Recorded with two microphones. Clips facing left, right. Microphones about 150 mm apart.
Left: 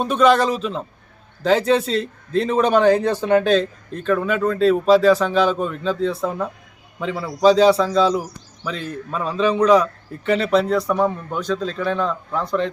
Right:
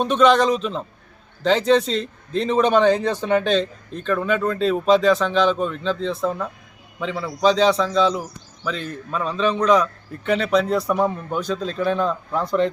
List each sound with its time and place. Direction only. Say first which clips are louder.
0.0 s a man's voice: even; 5° left (ahead or behind)